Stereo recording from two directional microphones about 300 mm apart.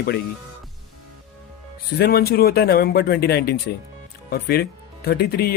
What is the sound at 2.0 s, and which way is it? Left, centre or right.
Speech, left.